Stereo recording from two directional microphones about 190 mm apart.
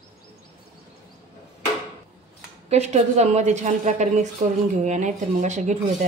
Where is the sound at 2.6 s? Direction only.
35° right (ahead or behind).